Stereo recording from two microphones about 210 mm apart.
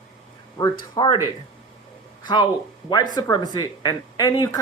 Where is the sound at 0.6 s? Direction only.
20° left (ahead or behind).